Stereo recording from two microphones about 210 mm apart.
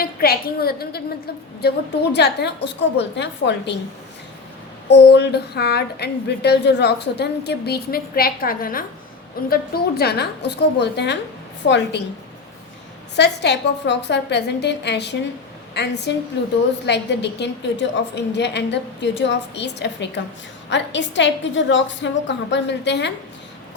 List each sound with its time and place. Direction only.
0.0 s a woman's voice: 45° left (ahead or behind)
4.9 s a woman's voice: 55° left (ahead or behind)
13.1 s a woman's voice: 55° left (ahead or behind)